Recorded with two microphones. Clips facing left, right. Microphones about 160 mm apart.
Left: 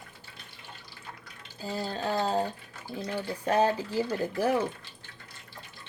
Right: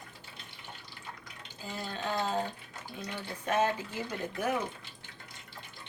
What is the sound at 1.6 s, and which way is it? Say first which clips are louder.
Speech: left 5 dB; 35° left (ahead or behind).